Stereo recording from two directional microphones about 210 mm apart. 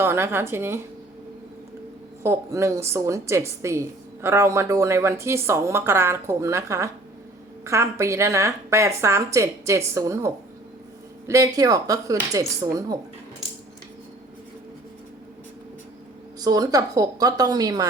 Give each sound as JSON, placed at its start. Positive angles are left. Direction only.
{"t": 0.0, "sound": "a woman's voice", "side_deg": -10}
{"t": 2.2, "sound": "a woman's voice", "side_deg": -15}
{"t": 16.4, "sound": "a woman's voice", "side_deg": -15}